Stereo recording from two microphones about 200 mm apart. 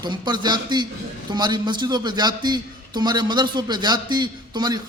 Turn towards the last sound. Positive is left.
turn(degrees=-20)  # may be behind; listen again after turning